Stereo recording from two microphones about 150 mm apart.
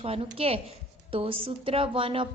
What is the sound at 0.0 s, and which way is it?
A woman's voice, 40° right (ahead or behind).